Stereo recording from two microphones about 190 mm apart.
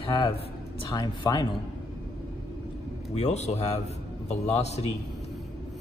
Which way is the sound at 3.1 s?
35° left (ahead or behind).